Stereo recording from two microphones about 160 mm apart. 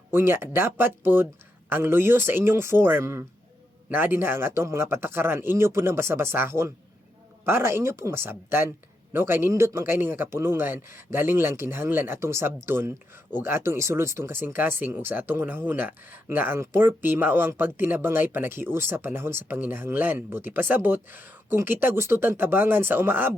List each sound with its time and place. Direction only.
0.1 s speech: 15° right (ahead or behind)